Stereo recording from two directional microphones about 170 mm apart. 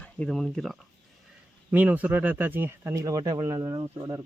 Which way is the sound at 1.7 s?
10° right (ahead or behind).